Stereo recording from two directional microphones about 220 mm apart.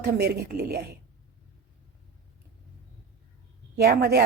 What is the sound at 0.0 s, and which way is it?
Speech, 45° right (ahead or behind).